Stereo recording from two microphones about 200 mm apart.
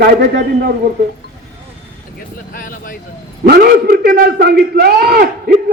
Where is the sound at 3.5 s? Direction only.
50° right (ahead or behind).